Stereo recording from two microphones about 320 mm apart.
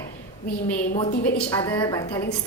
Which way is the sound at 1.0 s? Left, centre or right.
Left.